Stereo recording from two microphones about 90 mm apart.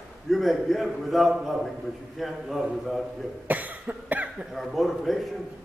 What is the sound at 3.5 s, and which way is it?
Cough, 20° right (ahead or behind).